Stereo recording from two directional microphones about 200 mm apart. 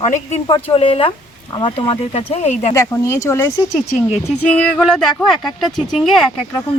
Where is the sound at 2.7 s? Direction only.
15° left (ahead or behind).